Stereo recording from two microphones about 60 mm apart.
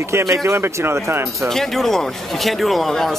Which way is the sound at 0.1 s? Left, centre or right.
Right.